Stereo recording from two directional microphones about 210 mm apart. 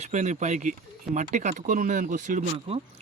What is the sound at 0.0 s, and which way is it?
Speech, 35° right (ahead or behind).